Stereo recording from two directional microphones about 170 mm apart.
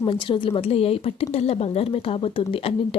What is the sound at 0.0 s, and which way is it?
Speech, 30° left (ahead or behind).